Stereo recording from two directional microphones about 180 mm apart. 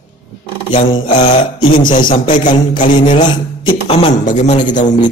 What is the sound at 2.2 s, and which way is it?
Speech, 45° left (ahead or behind).